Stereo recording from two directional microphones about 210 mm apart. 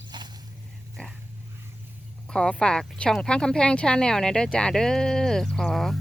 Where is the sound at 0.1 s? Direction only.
20° right (ahead or behind).